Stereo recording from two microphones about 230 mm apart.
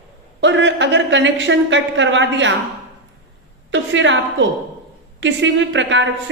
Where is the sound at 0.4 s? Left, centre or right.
Right.